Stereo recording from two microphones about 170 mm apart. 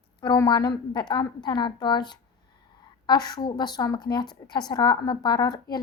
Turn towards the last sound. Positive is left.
turn(degrees=25)  # may be behind; listen again after turning